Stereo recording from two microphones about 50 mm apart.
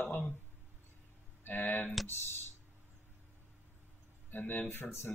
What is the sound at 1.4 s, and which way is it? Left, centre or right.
Speech, left.